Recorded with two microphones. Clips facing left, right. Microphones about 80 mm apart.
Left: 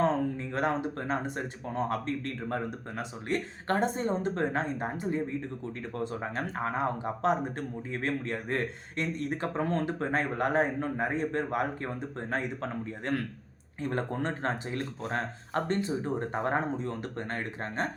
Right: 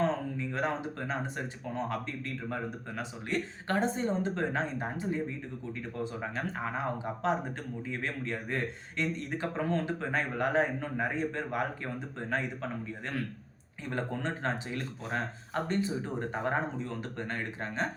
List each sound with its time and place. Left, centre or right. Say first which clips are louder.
0.5 s speech: left 3 dB; left
6.3 s speech: left 3 dB; left
12.4 s speech: left 2 dB; left